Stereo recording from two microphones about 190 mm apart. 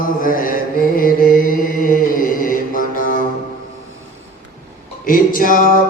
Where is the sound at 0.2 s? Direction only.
45° left (ahead or behind).